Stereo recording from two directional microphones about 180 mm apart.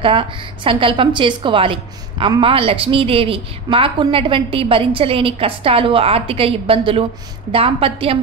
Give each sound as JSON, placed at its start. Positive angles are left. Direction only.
{"t": 0.0, "sound": "a woman's voice", "side_deg": -30}